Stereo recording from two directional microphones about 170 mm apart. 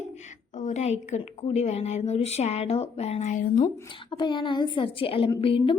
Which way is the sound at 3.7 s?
25° left (ahead or behind).